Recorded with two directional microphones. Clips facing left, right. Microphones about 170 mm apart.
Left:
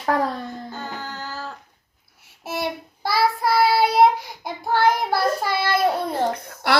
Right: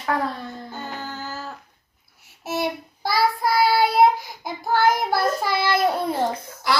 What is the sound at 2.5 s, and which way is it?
Child singing, centre (ahead or behind).